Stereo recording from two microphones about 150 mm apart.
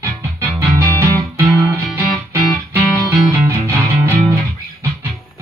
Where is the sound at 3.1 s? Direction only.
15° right (ahead or behind).